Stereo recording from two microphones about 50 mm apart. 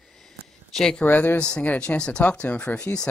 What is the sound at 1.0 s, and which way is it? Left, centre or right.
Speech, left.